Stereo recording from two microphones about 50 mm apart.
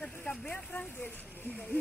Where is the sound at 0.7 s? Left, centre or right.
Left.